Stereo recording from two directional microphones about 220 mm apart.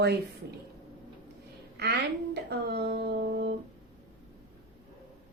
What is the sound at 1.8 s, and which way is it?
A woman's voice, 50° right (ahead or behind).